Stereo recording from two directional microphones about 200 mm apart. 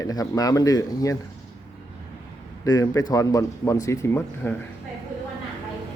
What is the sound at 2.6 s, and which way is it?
Speech, 15° left (ahead or behind).